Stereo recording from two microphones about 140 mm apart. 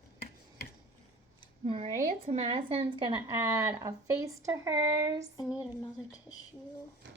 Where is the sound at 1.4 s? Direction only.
45° right (ahead or behind).